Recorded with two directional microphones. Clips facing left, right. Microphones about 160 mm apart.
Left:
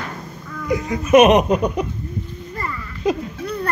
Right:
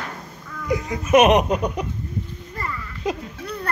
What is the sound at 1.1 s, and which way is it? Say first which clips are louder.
Speech: left 3 dB; 15° right (ahead or behind).